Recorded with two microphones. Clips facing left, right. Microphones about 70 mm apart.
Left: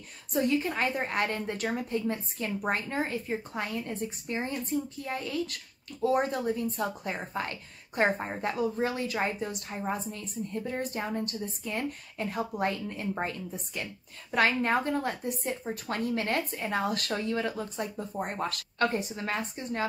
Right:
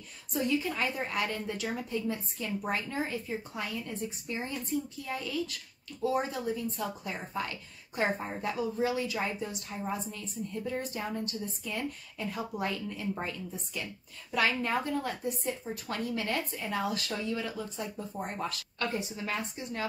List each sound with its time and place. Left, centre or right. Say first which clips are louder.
0.3 s a woman's voice: left 3 dB; left